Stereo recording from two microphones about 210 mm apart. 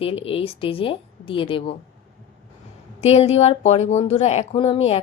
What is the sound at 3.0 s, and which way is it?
A woman's voice, 30° left (ahead or behind).